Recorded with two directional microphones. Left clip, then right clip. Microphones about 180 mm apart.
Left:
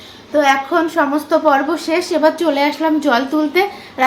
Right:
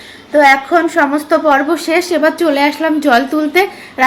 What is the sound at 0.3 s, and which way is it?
A woman's voice, 20° right (ahead or behind).